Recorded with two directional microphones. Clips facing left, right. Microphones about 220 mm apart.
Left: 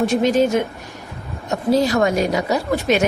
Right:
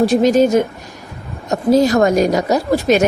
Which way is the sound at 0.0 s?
40° right (ahead or behind).